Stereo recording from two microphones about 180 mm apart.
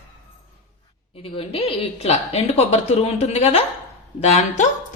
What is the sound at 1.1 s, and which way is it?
A woman's voice, 30° left (ahead or behind).